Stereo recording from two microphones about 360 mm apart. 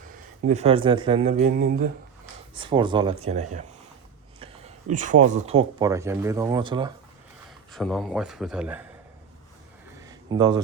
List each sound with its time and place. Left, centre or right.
0.4 s speech: centre
2.6 s speech: centre
4.4 s a sound: centre
5.2 s speech: centre
7.7 s speech: centre
10.0 s a sound: centre